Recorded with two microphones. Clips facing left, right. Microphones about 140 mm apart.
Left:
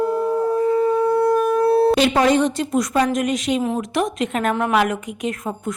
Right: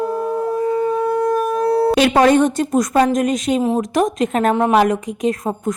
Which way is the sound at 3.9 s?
40° right (ahead or behind).